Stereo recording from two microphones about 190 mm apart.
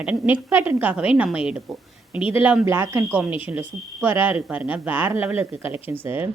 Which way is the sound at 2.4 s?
10° right (ahead or behind).